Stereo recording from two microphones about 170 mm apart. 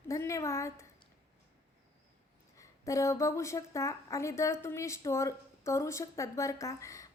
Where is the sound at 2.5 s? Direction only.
20° left (ahead or behind).